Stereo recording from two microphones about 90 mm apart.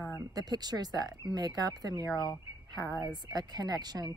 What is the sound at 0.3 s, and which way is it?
Speech, 45° right (ahead or behind).